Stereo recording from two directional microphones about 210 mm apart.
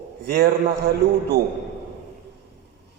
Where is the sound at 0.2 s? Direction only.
55° right (ahead or behind).